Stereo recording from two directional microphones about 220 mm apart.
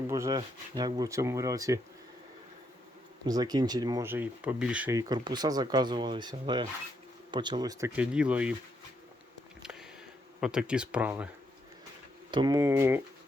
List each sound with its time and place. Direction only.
0.1 s speech: 15° right (ahead or behind)
3.2 s speech: 15° right (ahead or behind)
10.4 s speech: 5° right (ahead or behind)
12.3 s speech: 20° right (ahead or behind)